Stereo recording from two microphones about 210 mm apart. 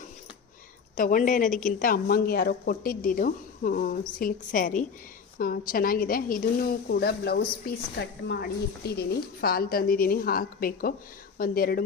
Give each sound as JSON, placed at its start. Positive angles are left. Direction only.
{"t": 0.9, "sound": "a woman's voice", "side_deg": 40}